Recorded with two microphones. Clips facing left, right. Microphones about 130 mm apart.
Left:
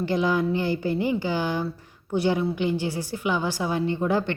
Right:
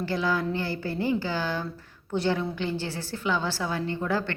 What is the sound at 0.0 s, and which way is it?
A woman's voice, 20° left (ahead or behind).